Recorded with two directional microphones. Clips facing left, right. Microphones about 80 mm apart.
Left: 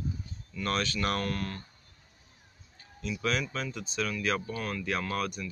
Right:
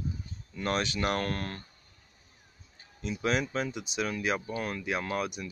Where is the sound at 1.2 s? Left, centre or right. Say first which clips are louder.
Even; right.